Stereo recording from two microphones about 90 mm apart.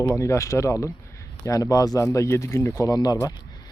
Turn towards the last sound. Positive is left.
turn(degrees=40)  # may be behind; listen again after turning